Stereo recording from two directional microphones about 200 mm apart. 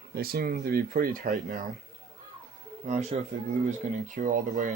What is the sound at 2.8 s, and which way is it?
Speech, 35° right (ahead or behind).